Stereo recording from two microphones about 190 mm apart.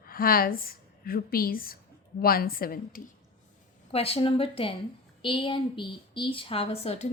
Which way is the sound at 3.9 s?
30° left (ahead or behind).